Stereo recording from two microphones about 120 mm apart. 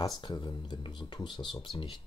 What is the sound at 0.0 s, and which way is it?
Speech, 40° left (ahead or behind).